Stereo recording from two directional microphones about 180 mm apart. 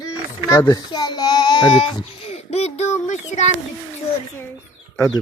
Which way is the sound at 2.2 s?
35° left (ahead or behind).